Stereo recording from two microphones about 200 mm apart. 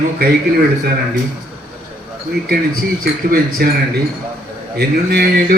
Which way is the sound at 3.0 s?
50° right (ahead or behind).